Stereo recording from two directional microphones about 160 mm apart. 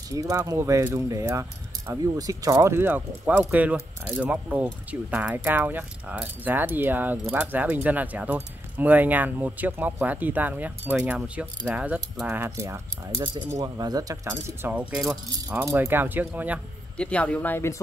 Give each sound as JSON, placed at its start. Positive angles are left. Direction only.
{"t": 0.1, "sound": "speech", "side_deg": -20}
{"t": 16.9, "sound": "speech", "side_deg": 5}